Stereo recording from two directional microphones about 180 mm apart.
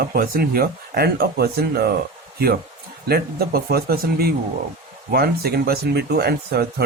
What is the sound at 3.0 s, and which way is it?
Speech, 60° right (ahead or behind).